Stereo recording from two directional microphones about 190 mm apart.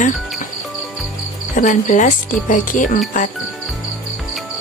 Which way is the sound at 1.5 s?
45° left (ahead or behind).